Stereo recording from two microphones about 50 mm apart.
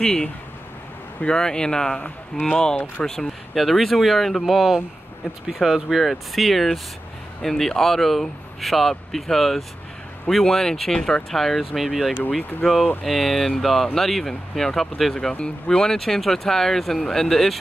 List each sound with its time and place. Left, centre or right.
0.0 s speech: centre
3.1 s speech: centre